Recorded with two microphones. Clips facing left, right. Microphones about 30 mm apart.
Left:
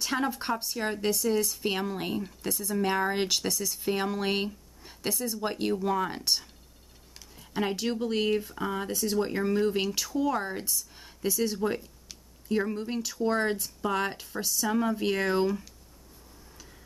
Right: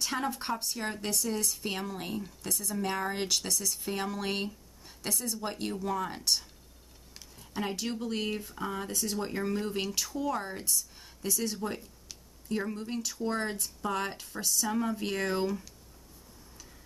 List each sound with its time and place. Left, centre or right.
0.0 s speech: centre
3.5 s speech: centre